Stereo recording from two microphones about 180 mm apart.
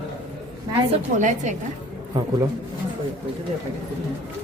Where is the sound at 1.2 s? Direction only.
45° right (ahead or behind).